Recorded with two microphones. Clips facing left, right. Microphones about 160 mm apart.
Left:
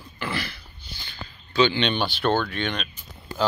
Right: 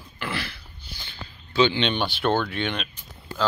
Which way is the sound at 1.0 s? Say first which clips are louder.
Left 1 dB; 25° right (ahead or behind).